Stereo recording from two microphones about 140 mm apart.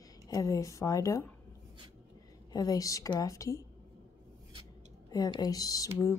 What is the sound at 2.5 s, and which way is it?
Speech, 25° left (ahead or behind).